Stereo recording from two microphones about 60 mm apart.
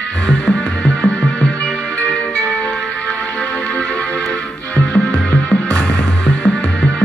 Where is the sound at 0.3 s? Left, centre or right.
Centre.